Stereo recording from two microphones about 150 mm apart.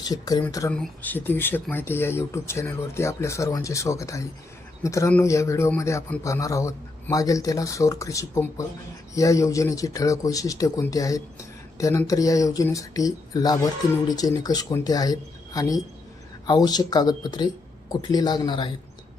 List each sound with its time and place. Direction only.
0.1 s a man's voice: 25° left (ahead or behind)
0.7 s a man's voice: 10° left (ahead or behind); by 18.7 s 30° left (ahead or behind)